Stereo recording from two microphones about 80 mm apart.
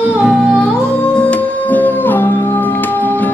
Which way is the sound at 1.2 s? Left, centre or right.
Centre.